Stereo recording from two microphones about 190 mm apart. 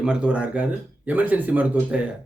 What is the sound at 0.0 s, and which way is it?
Speech, 5° right (ahead or behind).